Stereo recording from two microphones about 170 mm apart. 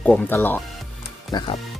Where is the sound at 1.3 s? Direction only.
25° left (ahead or behind).